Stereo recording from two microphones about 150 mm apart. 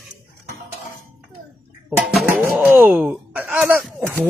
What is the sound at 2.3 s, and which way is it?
Speech, 10° right (ahead or behind).